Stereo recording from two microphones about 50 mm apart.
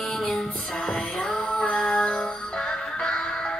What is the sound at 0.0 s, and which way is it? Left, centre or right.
Music, centre.